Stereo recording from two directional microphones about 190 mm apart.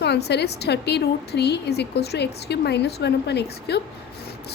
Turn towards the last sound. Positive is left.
turn(degrees=60)  # may be behind; listen again after turning